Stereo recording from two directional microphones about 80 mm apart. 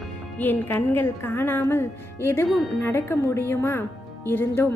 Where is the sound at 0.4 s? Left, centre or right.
Left.